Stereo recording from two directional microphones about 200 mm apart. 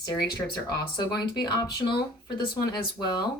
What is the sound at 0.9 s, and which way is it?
Speech, 20° left (ahead or behind).